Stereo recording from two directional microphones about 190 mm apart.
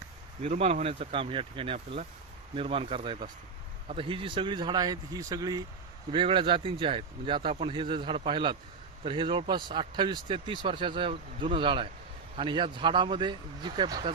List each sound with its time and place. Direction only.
0.4 s speech: 35° right (ahead or behind)